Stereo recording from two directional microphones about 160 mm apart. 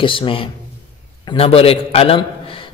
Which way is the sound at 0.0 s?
30° left (ahead or behind).